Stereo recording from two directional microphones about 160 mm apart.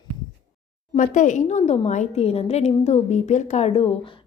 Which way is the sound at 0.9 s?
50° left (ahead or behind).